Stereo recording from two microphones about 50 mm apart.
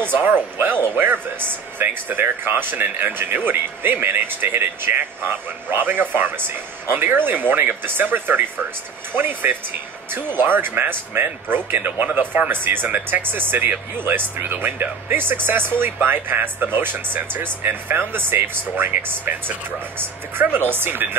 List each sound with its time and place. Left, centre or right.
0.2 s speech: right
12.8 s speech: right
13.2 s speech: right